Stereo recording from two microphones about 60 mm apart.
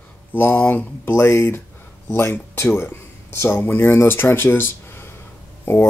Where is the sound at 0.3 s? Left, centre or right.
Left.